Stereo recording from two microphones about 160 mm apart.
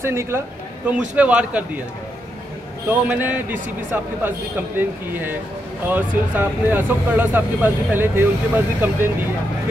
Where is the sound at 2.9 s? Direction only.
10° right (ahead or behind).